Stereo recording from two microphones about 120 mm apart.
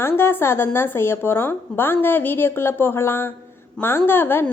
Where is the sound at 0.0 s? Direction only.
20° left (ahead or behind).